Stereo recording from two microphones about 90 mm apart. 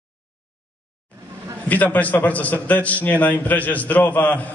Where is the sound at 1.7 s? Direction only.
20° left (ahead or behind).